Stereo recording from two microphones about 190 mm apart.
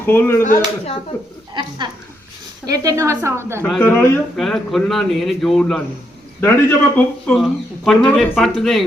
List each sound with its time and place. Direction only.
0.0 s speech: 10° left (ahead or behind)
1.8 s a woman's voice: 25° right (ahead or behind)
3.6 s a man's voice: 10° left (ahead or behind)